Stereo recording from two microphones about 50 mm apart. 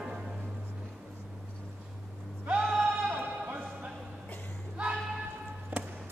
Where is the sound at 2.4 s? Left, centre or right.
Right.